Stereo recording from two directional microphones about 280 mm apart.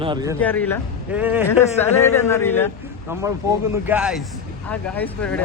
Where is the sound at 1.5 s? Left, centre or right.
Centre.